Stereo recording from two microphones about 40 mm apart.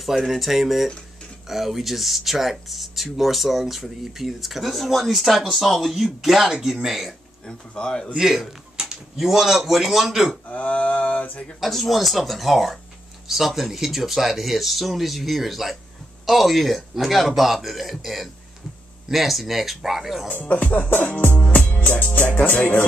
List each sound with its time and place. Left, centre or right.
0.0 s a man's voice: centre
7.4 s speech: left
8.2 s a sound: centre
9.1 s a man's voice: centre
10.5 s mantra: left
11.6 s speech: centre
20.2 s music: left
21.5 s music: left
21.8 s music: left